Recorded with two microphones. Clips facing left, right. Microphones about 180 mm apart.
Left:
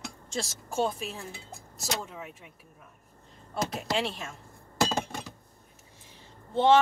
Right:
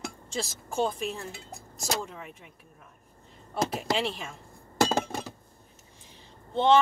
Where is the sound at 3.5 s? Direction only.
Centre (ahead or behind).